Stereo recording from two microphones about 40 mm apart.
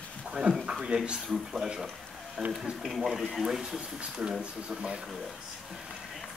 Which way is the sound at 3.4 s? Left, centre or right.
Centre.